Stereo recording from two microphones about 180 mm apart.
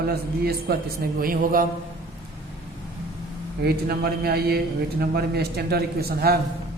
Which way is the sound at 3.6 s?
60° right (ahead or behind).